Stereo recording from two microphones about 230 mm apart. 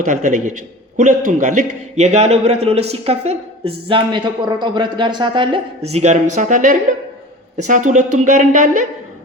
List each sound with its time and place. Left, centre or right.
0.0 s a man's voice: right